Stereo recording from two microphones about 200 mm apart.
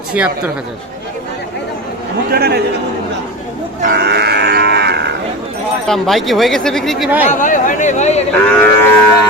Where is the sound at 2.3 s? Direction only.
50° right (ahead or behind).